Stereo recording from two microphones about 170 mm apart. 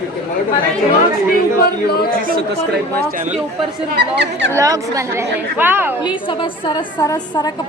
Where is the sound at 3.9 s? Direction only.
90° right.